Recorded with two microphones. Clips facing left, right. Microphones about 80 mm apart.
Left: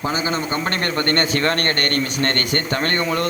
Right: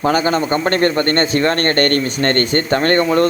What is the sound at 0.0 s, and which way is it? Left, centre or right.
Speech, right.